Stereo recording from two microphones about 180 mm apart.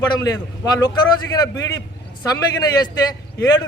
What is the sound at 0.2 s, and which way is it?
A man's voice, 20° left (ahead or behind).